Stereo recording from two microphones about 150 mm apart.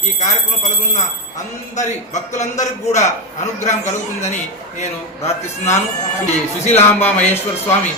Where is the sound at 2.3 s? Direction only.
50° left (ahead or behind).